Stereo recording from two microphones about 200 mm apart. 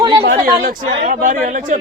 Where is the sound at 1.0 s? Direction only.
40° right (ahead or behind).